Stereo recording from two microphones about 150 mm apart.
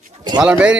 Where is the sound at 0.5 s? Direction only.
10° right (ahead or behind).